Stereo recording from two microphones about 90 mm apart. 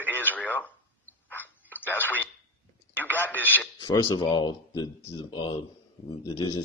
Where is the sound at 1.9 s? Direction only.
20° left (ahead or behind).